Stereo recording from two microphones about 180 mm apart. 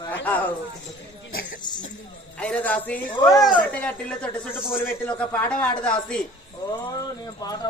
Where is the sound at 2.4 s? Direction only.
5° left (ahead or behind).